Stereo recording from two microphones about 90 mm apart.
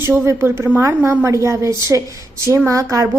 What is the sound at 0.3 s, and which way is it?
A woman's voice, 30° right (ahead or behind).